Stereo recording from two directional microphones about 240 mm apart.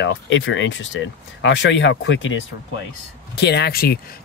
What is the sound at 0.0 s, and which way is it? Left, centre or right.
Speech, left.